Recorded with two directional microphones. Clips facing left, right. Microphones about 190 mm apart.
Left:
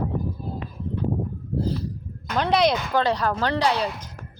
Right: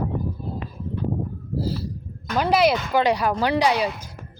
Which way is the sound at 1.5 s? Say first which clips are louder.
Left 1 dB; 5° right (ahead or behind).